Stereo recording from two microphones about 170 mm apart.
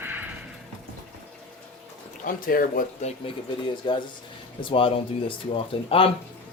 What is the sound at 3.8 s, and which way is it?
Speech, 30° left (ahead or behind).